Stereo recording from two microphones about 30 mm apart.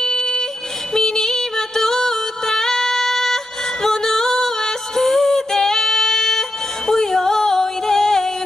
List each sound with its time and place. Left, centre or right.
0.0 s a sound: left
0.9 s music: centre
3.8 s female singing: centre
6.9 s music: centre